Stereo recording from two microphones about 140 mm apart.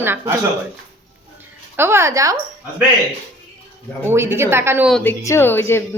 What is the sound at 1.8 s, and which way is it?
Speech, 15° right (ahead or behind).